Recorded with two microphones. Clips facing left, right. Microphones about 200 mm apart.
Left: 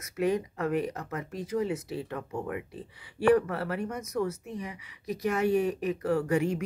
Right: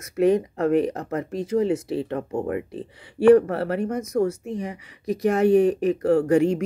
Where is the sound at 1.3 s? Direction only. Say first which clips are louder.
Right 8 dB; 30° right (ahead or behind).